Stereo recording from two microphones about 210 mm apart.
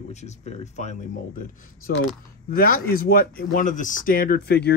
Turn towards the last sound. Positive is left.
turn(degrees=50)  # may be behind; listen again after turning